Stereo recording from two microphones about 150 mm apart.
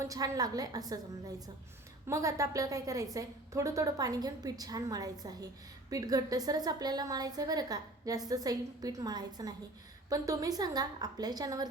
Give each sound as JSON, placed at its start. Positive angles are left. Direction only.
{"t": 0.0, "sound": "a woman's voice", "side_deg": -25}
{"t": 2.0, "sound": "a woman's voice", "side_deg": -20}